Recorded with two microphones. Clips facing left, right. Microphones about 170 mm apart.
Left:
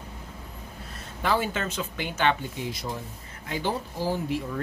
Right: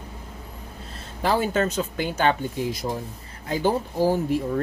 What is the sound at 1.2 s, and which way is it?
Speech, 40° right (ahead or behind).